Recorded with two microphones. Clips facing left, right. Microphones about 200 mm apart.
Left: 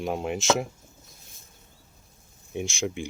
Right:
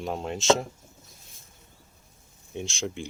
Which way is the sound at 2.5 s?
10° left (ahead or behind).